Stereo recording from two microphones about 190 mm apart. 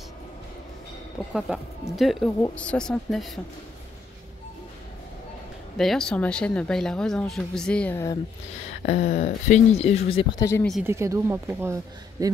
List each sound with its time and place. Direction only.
1.3 s speech: centre (ahead or behind)
5.8 s speech: centre (ahead or behind)
8.8 s speech: 40° left (ahead or behind)
10.4 s speech: 15° left (ahead or behind)
10.9 s a woman's voice: 15° right (ahead or behind)